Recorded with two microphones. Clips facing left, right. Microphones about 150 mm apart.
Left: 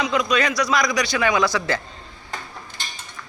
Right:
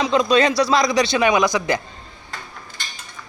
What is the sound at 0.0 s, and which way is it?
A man's voice, 30° right (ahead or behind).